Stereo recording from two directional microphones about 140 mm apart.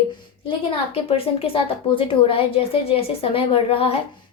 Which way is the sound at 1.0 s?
40° left (ahead or behind).